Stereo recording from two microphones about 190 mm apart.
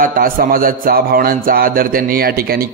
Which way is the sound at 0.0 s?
45° right (ahead or behind).